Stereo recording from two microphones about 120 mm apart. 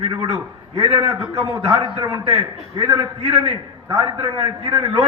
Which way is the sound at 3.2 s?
60° right (ahead or behind).